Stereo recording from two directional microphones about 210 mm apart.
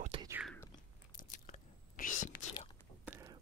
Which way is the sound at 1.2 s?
40° left (ahead or behind).